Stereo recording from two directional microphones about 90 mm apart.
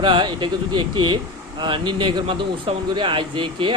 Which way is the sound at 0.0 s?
60° right (ahead or behind).